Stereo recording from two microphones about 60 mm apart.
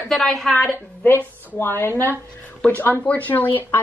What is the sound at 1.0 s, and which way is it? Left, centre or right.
Speech, left.